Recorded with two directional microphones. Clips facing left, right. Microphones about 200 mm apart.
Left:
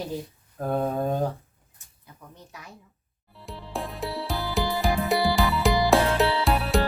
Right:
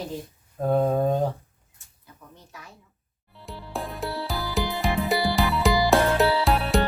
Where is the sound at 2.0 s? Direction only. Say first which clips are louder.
Left 1 dB; 20° left (ahead or behind).